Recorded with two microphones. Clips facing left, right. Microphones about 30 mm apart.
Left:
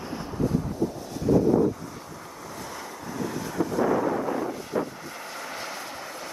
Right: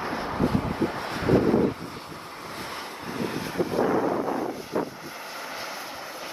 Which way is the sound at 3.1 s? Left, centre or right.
Right.